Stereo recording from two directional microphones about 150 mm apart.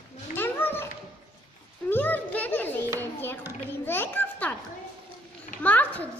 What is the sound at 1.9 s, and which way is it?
A woman's voice, 15° left (ahead or behind).